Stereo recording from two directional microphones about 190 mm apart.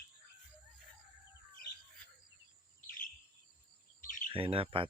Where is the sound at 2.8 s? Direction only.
45° left (ahead or behind).